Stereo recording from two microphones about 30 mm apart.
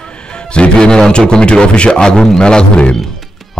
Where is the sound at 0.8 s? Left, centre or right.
Left.